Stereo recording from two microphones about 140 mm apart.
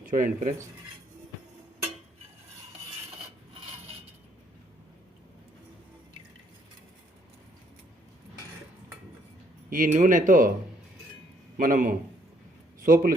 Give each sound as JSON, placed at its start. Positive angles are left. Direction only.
{"t": 0.1, "sound": "speech", "side_deg": -70}
{"t": 9.6, "sound": "speech", "side_deg": -75}
{"t": 11.5, "sound": "speech", "side_deg": -80}
{"t": 12.8, "sound": "a man's voice", "side_deg": -85}